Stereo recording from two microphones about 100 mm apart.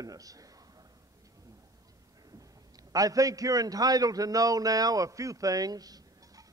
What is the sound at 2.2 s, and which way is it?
A man's voice, 40° right (ahead or behind).